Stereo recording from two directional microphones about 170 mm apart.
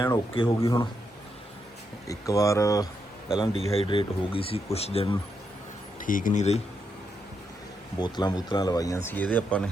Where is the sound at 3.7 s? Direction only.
30° left (ahead or behind).